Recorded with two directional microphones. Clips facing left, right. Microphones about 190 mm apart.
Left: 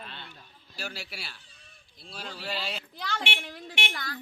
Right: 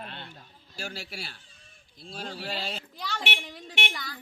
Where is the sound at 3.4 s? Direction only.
Centre (ahead or behind).